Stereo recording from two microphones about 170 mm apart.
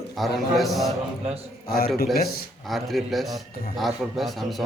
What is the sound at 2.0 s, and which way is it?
Speech, 65° left (ahead or behind).